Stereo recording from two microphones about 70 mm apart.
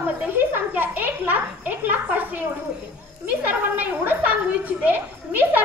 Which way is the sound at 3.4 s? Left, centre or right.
Right.